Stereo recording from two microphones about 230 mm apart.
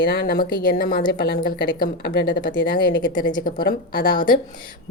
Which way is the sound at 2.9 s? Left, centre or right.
Left.